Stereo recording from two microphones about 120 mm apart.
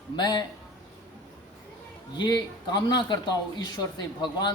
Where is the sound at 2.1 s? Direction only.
40° left (ahead or behind).